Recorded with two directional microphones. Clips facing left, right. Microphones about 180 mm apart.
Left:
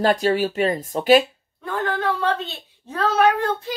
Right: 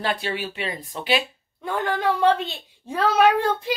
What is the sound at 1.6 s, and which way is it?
A woman's voice, 10° right (ahead or behind).